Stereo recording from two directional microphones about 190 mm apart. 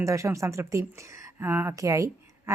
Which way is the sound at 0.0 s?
15° right (ahead or behind).